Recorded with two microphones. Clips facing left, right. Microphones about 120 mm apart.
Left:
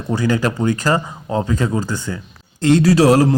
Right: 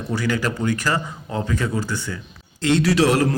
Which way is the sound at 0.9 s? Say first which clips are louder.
Left 5 dB; 40° left (ahead or behind).